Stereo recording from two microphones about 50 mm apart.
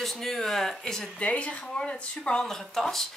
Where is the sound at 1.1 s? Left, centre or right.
Left.